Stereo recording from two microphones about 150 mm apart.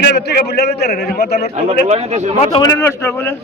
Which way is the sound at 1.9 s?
45° right (ahead or behind).